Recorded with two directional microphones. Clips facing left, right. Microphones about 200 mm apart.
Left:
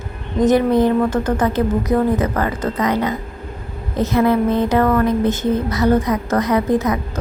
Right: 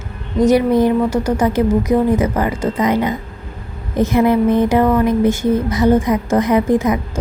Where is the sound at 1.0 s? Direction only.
10° right (ahead or behind).